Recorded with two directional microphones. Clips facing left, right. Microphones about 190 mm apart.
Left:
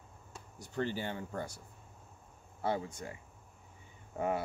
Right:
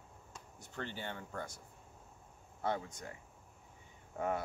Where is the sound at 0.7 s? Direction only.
10° left (ahead or behind).